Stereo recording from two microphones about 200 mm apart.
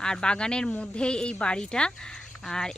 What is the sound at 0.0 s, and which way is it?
Speech, 5° left (ahead or behind).